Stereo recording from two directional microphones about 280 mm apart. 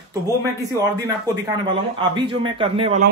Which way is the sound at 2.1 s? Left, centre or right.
Centre.